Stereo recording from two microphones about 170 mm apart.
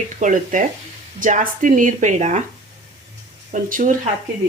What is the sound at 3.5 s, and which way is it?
Speech, 50° right (ahead or behind).